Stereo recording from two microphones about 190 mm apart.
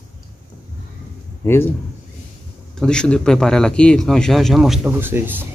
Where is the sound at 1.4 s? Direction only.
10° left (ahead or behind).